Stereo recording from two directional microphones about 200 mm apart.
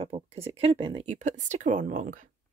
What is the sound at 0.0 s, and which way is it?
Speech, 30° right (ahead or behind).